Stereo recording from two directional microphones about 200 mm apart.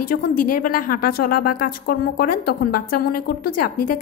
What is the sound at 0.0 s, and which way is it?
A woman's voice, 45° left (ahead or behind).